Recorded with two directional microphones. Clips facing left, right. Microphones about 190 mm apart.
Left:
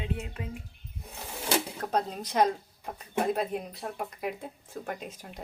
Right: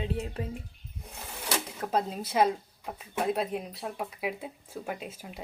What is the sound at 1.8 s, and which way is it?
Speech, 5° right (ahead or behind).